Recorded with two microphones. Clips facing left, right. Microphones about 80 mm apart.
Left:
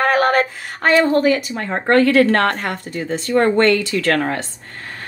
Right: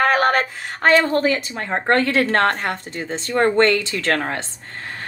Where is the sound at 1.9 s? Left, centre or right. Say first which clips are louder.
Left 5 dB; right.